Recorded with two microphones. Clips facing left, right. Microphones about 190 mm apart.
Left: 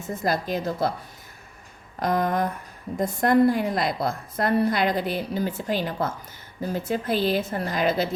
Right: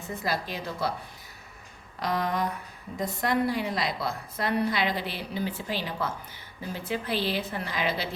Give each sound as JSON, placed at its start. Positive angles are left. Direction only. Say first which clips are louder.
{"t": 0.1, "sound": "a woman's voice", "louder": "left 6 dB", "side_deg": 45}
{"t": 2.0, "sound": "a woman's voice", "louder": "left 5 dB", "side_deg": 50}